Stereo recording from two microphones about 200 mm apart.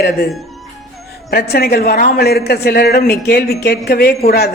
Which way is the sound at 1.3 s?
50° left (ahead or behind).